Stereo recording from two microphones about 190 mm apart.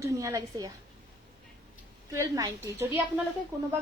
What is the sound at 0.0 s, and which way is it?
Speech, 15° right (ahead or behind).